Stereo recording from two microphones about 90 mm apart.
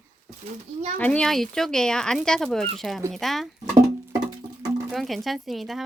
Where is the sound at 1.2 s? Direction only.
5° left (ahead or behind).